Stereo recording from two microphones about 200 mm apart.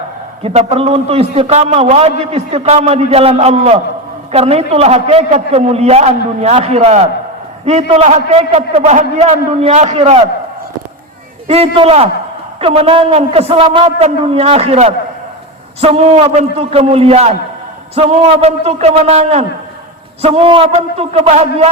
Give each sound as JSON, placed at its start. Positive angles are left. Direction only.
{"t": 0.4, "sound": "a man's voice", "side_deg": -30}
{"t": 11.4, "sound": "a man's voice", "side_deg": -30}